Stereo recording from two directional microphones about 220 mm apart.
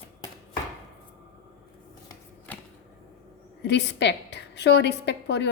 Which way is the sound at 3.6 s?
50° left (ahead or behind).